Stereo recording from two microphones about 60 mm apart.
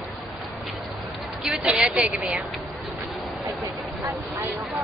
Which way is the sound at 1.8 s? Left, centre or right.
Centre.